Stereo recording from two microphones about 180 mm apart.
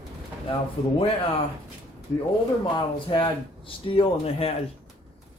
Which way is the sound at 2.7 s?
25° left (ahead or behind).